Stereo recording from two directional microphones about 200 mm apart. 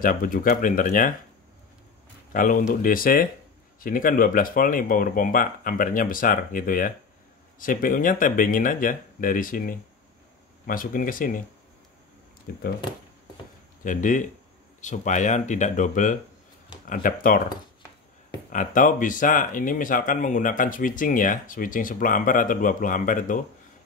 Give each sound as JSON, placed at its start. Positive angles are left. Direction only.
{"t": 0.0, "sound": "speech", "side_deg": 45}
{"t": 2.3, "sound": "speech", "side_deg": 40}
{"t": 12.5, "sound": "speech", "side_deg": 50}
{"t": 13.8, "sound": "speech", "side_deg": 40}